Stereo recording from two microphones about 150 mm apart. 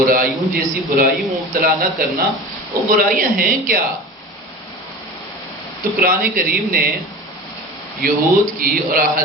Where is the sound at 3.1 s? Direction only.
65° right (ahead or behind).